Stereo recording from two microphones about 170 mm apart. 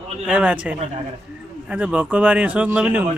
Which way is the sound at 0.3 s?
5° right (ahead or behind).